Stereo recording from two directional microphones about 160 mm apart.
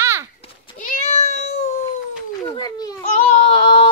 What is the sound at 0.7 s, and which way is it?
Meow, 50° left (ahead or behind).